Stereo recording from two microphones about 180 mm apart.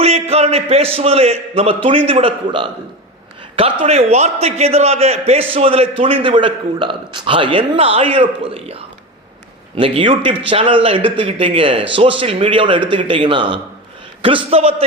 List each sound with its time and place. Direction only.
0.0 s a man's voice: 35° right (ahead or behind)